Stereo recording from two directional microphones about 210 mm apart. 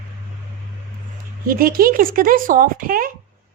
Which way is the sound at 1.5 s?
45° right (ahead or behind).